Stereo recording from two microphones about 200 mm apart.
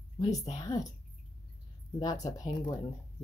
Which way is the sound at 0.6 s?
20° left (ahead or behind).